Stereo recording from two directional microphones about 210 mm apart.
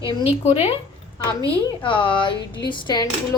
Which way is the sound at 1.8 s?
25° left (ahead or behind).